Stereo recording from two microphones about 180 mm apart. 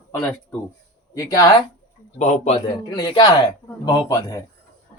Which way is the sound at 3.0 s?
25° left (ahead or behind).